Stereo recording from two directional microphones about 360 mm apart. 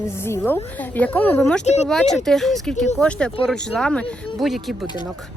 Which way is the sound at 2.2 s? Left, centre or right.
Centre.